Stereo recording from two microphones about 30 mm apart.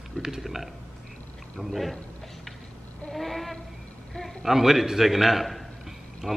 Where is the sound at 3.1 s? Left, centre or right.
Centre.